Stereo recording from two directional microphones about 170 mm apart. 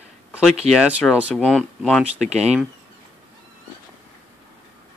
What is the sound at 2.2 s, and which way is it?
Speech, 40° right (ahead or behind).